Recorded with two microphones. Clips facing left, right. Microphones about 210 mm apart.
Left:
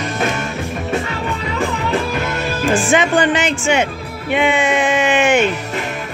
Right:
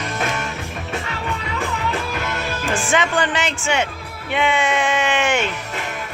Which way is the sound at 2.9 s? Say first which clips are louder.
Left 4 dB; 20° left (ahead or behind).